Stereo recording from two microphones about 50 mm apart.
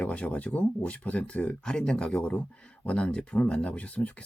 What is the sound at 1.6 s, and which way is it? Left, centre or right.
Speech, centre.